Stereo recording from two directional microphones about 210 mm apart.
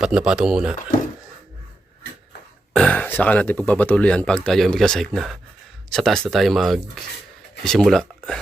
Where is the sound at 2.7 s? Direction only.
5° left (ahead or behind).